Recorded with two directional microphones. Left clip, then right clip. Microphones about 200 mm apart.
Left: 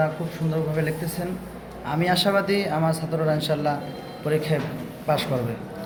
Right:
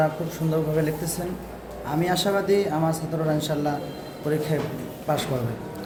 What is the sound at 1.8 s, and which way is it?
Speech, 5° right (ahead or behind).